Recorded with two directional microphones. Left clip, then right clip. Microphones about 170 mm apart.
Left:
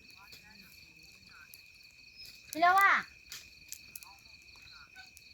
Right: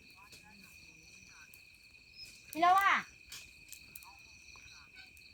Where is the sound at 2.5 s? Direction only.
30° left (ahead or behind).